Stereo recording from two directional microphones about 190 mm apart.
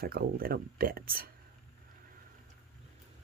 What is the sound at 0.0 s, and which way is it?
Speech, 55° right (ahead or behind).